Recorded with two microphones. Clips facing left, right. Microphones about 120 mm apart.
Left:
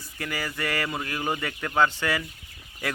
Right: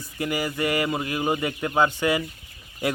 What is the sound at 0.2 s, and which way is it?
Speech, 20° right (ahead or behind).